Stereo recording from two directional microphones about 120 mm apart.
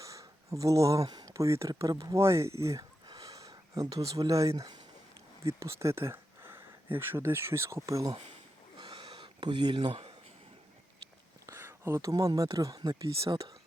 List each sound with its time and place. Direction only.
0.0 s speech: 25° right (ahead or behind)
8.8 s a sound: 35° right (ahead or behind)
11.4 s speech: 20° right (ahead or behind)